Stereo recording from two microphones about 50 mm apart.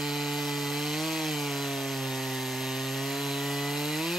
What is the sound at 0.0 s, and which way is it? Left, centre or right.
Wood, centre.